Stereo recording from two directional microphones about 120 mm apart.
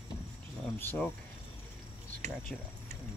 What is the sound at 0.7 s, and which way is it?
Speech, 15° left (ahead or behind).